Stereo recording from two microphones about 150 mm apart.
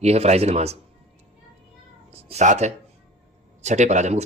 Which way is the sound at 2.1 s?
45° right (ahead or behind).